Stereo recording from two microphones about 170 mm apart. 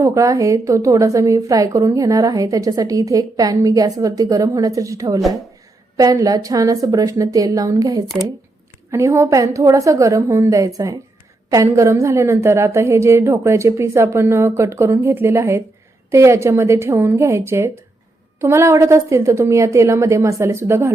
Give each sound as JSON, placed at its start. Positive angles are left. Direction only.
{"t": 0.0, "sound": "a woman's voice", "side_deg": -20}